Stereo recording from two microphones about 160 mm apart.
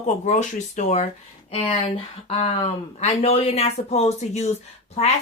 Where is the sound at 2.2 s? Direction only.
40° left (ahead or behind).